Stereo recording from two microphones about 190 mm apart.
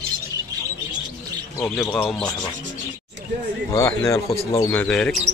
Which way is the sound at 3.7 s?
15° left (ahead or behind).